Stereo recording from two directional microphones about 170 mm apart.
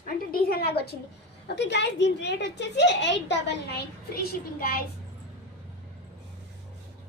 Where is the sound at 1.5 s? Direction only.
90° left.